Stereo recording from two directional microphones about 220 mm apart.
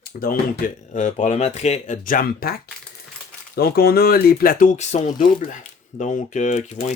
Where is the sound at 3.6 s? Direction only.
45° left (ahead or behind).